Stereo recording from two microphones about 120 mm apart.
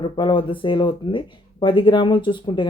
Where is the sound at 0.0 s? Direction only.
40° left (ahead or behind).